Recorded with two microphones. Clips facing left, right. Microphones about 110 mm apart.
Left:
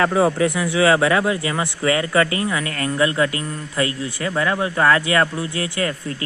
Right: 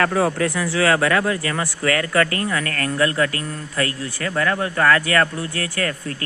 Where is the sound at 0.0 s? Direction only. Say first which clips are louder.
Left 2 dB; 15° left (ahead or behind).